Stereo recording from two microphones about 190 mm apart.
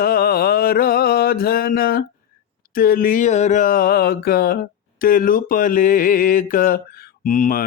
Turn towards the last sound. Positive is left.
turn(degrees=45)  # may be behind; listen again after turning